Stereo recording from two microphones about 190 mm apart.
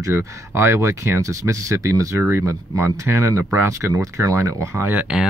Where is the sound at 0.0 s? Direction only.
15° right (ahead or behind).